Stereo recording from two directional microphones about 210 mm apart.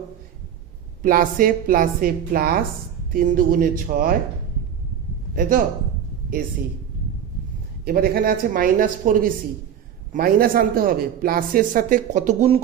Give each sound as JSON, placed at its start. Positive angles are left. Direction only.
{"t": 1.0, "sound": "a woman's voice", "side_deg": -40}
{"t": 5.3, "sound": "a man's voice", "side_deg": -40}
{"t": 7.9, "sound": "a woman's voice", "side_deg": -45}